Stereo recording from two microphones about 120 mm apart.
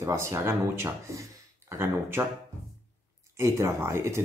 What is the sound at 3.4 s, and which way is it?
Speech, 20° right (ahead or behind).